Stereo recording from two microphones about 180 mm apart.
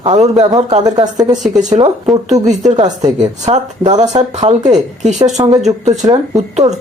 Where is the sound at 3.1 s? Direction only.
40° right (ahead or behind).